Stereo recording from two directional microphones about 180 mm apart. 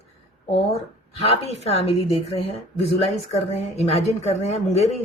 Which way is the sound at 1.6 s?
35° left (ahead or behind).